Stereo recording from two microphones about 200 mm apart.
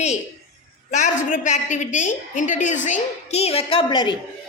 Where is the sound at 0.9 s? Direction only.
35° left (ahead or behind).